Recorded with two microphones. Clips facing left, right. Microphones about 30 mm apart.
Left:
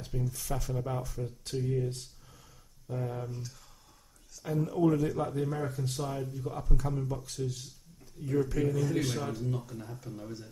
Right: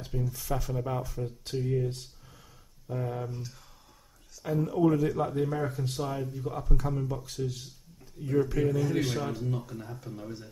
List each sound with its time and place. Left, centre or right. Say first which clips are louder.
0.0 s speech: right 2 dB; centre